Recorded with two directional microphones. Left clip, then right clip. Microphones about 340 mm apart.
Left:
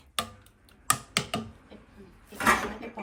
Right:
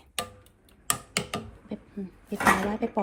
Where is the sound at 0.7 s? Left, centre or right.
Centre.